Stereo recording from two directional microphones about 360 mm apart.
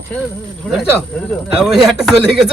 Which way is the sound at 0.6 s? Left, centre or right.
Centre.